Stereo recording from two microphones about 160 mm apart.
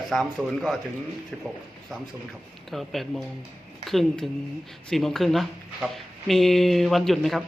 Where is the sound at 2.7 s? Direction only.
Centre (ahead or behind).